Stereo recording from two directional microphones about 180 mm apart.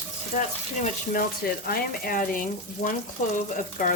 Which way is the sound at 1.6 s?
55° left (ahead or behind).